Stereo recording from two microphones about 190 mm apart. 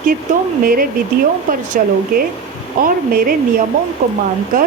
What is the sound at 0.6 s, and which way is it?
Speech, 50° right (ahead or behind).